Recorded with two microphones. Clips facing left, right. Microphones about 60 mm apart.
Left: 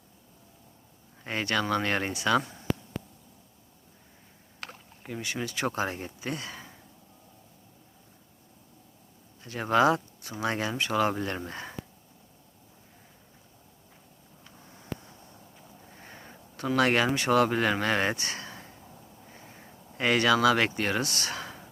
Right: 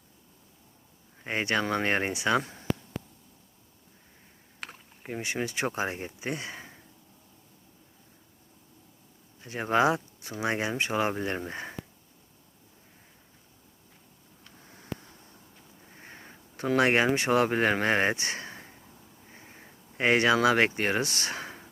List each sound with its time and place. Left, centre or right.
1.2 s speech: right
4.6 s rowboat: centre
5.0 s speech: right
9.4 s speech: right
16.0 s sniff: right
16.7 s speech: right